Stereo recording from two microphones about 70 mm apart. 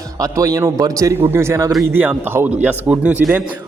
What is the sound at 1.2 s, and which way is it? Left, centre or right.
Speech, right.